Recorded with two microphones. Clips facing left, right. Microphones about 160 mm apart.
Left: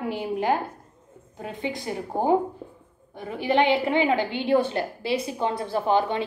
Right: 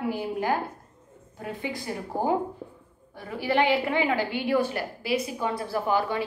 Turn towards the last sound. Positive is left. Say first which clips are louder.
# left 3 dB
turn(degrees=25)  # may be behind; listen again after turning